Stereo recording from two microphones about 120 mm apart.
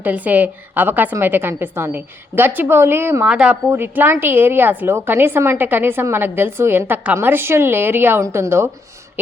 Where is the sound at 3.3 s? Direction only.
10° right (ahead or behind).